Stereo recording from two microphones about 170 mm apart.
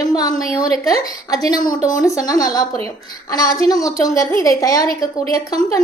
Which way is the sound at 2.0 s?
20° left (ahead or behind).